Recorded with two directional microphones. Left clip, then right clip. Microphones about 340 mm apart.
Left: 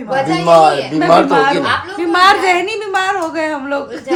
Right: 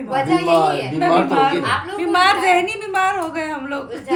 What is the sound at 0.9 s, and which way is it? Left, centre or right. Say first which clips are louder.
A woman's voice: left 4 dB; centre.